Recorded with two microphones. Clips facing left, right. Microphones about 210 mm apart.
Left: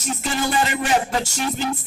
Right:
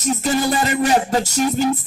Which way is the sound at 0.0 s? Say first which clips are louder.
Right 6 dB; 40° right (ahead or behind).